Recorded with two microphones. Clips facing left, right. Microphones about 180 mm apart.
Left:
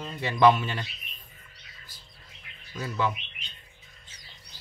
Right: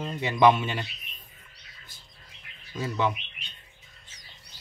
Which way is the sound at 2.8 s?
20° right (ahead or behind).